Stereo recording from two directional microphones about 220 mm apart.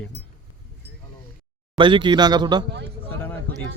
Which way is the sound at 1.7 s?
20° right (ahead or behind).